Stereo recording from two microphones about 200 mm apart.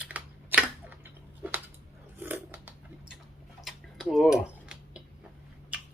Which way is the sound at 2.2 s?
10° right (ahead or behind).